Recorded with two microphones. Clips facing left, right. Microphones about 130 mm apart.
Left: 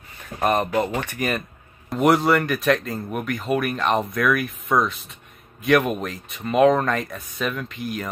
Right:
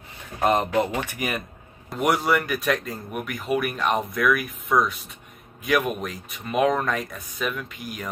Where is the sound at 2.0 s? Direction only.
Centre (ahead or behind).